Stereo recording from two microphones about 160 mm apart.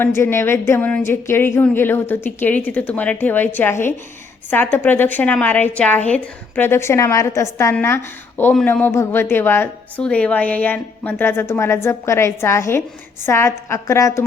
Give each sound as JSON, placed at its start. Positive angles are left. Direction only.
{"t": 0.0, "sound": "a woman's voice", "side_deg": 15}